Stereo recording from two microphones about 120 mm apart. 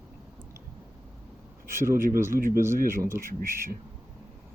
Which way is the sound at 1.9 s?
20° right (ahead or behind).